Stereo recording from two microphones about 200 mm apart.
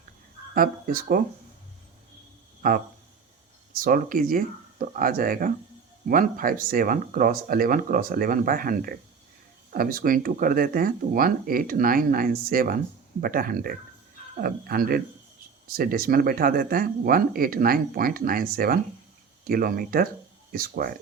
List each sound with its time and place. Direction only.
0.5 s speech: 45° right (ahead or behind)
2.6 s speech: 45° right (ahead or behind)